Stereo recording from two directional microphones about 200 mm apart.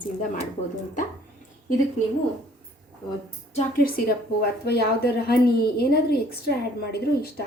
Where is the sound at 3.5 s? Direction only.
40° left (ahead or behind).